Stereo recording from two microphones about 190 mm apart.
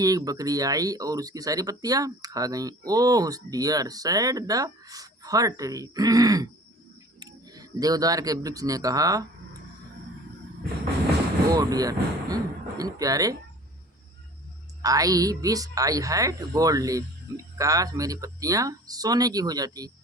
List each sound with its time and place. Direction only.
0.0 s speech: 20° right (ahead or behind)
11.4 s speech: 20° right (ahead or behind)
14.8 s speech: 20° right (ahead or behind)